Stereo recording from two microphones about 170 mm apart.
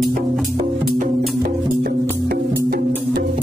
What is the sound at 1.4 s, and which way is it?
Music, 55° right (ahead or behind).